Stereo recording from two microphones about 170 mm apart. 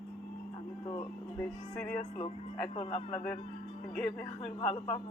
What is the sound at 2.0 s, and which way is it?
Speech, 40° left (ahead or behind).